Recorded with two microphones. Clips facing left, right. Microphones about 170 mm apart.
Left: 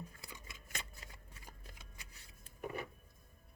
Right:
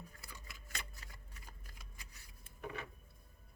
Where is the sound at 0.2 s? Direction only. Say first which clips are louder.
Left 2 dB; 20° left (ahead or behind).